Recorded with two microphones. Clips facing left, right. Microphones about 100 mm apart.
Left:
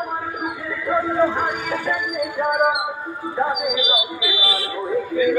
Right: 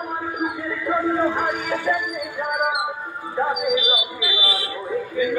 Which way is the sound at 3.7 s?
20° left (ahead or behind).